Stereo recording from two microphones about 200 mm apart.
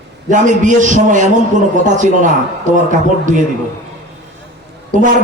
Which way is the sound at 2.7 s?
40° right (ahead or behind).